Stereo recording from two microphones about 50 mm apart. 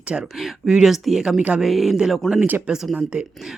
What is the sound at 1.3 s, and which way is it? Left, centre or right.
Speech, right.